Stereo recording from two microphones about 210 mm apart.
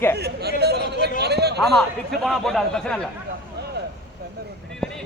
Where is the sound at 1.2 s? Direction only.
50° right (ahead or behind).